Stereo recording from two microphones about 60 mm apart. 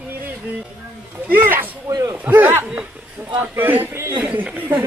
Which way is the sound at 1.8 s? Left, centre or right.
Right.